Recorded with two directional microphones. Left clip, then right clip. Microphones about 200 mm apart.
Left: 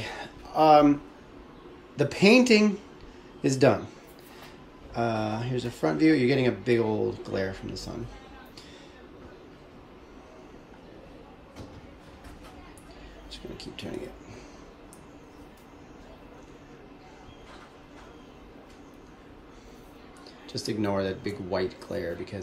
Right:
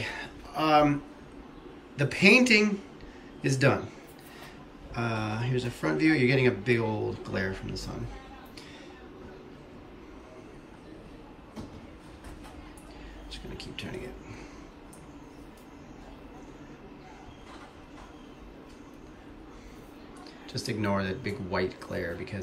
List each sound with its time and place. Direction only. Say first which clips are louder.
0.0 s a sound: right 1 dB; 10° left (ahead or behind)
2.0 s speech: left 1 dB; 15° left (ahead or behind)
4.9 s speech: left 4 dB; 10° left (ahead or behind)
20.6 s speech: left 2 dB; 5° left (ahead or behind)